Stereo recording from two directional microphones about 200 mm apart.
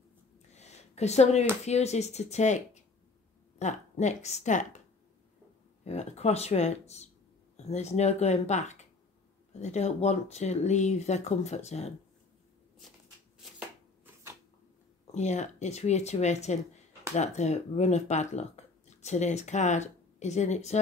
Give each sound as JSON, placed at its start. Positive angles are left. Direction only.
{"t": 0.6, "sound": "a sound", "side_deg": 35}
{"t": 1.7, "sound": "speech", "side_deg": 35}
{"t": 5.9, "sound": "speech", "side_deg": 35}
{"t": 13.6, "sound": "shuffling cards", "side_deg": -10}
{"t": 15.1, "sound": "speech", "side_deg": 35}